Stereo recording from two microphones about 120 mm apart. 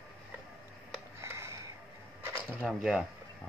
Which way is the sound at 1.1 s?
20° right (ahead or behind).